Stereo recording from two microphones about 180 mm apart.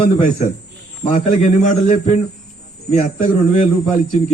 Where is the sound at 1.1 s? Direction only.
45° left (ahead or behind).